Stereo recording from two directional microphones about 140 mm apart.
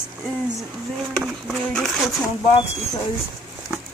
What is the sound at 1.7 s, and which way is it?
Speech, centre (ahead or behind).